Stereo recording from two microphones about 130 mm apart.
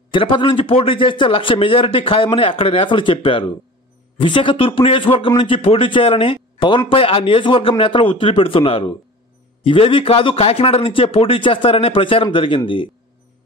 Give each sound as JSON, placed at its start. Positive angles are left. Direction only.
{"t": 0.1, "sound": "a man's voice", "side_deg": 40}